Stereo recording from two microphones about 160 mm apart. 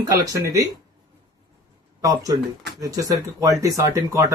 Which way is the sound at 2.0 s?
20° right (ahead or behind).